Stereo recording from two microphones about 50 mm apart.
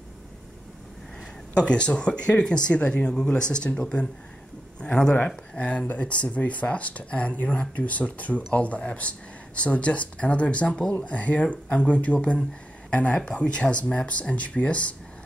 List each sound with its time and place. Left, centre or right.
1.5 s a man's voice: left